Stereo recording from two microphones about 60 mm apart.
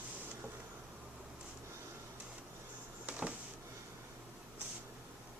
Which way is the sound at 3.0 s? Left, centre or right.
Right.